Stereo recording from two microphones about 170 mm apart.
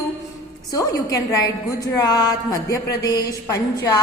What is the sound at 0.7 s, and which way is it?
A woman's voice, 20° left (ahead or behind).